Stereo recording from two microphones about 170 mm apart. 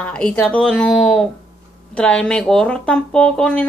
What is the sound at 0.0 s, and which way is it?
A woman's voice, 5° left (ahead or behind).